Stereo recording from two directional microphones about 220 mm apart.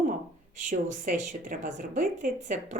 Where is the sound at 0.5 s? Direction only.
35° right (ahead or behind).